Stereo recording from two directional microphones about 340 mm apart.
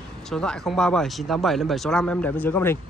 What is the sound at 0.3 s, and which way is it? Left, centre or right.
Speech, centre.